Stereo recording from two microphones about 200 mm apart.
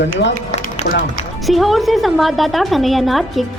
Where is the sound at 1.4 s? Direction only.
Centre (ahead or behind).